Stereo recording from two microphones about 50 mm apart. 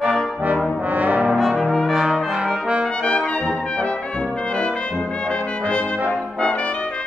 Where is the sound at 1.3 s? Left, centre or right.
Centre.